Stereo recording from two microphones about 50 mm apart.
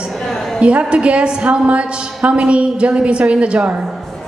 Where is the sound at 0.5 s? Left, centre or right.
Right.